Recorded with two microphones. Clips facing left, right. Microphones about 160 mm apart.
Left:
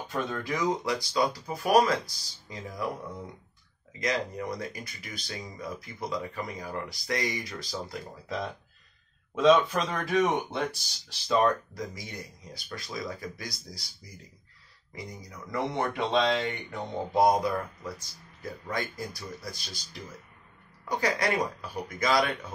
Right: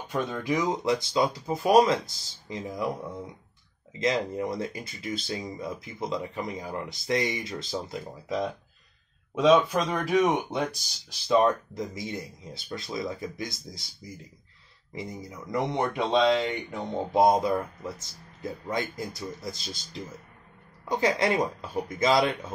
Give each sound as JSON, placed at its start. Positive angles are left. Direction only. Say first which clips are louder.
{"t": 0.1, "sound": "speech", "louder": "right 4 dB", "side_deg": -15}
{"t": 4.0, "sound": "speech", "louder": "right 4 dB", "side_deg": -25}